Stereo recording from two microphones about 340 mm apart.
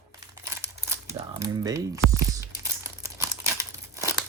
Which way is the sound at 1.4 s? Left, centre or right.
Centre.